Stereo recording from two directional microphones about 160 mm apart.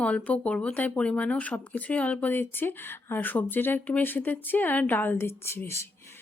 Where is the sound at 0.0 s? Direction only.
10° left (ahead or behind).